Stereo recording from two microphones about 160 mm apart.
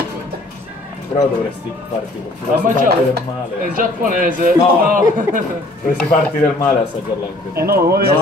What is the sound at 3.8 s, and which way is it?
A man's voice, 60° right (ahead or behind).